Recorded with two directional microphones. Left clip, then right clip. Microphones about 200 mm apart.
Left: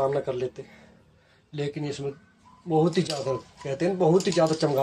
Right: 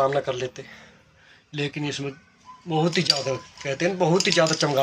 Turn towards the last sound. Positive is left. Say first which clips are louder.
# right 2 dB
turn(degrees=0)  # may be behind; listen again after turning